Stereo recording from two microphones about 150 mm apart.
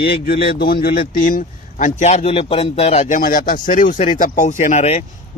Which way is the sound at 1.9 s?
50° left (ahead or behind).